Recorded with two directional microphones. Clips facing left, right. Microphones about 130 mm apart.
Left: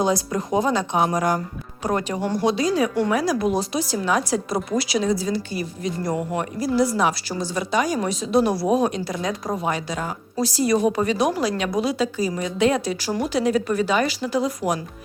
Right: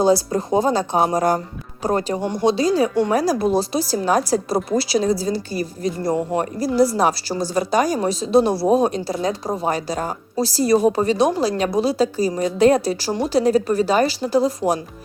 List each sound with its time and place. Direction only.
0.0 s a woman's voice: 30° right (ahead or behind)
3.1 s a woman's voice: 35° right (ahead or behind)